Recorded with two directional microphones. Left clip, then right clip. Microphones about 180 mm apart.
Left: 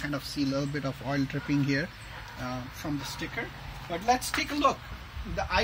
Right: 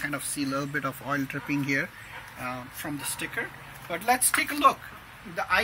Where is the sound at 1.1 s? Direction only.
20° left (ahead or behind).